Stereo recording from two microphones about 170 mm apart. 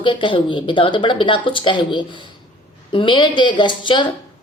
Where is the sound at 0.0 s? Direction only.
30° left (ahead or behind).